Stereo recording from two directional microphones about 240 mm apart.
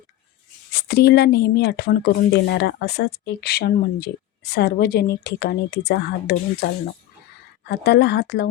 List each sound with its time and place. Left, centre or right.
0.7 s speech: left
7.7 s speech: left